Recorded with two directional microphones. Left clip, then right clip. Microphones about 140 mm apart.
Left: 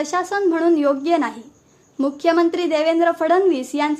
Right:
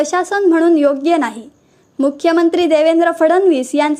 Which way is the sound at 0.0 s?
40° right (ahead or behind).